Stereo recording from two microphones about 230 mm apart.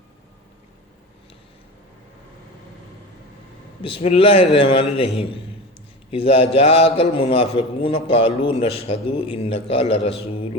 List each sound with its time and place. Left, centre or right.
3.8 s a man's voice: left